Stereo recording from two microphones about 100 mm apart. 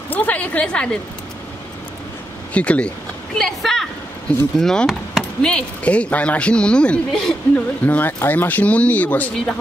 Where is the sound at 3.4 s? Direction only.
5° left (ahead or behind).